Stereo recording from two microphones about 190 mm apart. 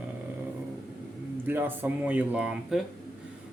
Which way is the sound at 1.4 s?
10° right (ahead or behind).